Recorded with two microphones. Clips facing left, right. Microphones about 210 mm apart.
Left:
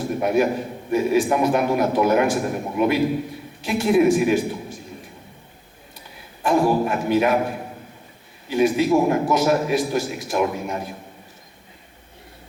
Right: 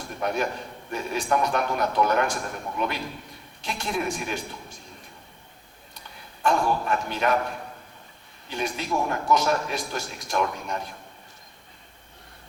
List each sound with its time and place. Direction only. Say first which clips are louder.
0.2 s a man's voice: left 7 dB; 10° left (ahead or behind)
6.4 s a man's voice: left 6 dB; 5° left (ahead or behind)
9.0 s a man's voice: left 9 dB; 20° left (ahead or behind)
9.3 s a man's voice: left 5 dB; 5° left (ahead or behind)